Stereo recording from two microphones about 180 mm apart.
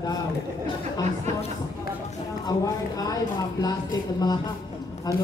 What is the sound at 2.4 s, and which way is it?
A woman's voice, 20° left (ahead or behind).